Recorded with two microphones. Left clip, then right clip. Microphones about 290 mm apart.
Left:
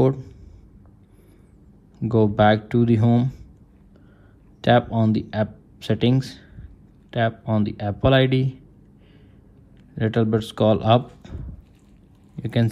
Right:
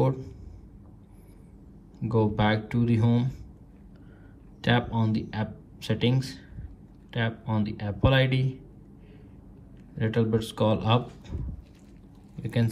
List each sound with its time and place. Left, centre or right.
0.0 s speech: left
2.0 s speech: left
4.6 s speech: left
10.1 s speech: left